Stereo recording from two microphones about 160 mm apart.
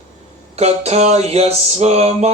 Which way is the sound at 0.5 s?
40° right (ahead or behind).